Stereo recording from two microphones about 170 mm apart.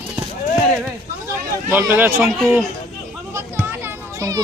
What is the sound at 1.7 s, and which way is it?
Speech, 15° right (ahead or behind).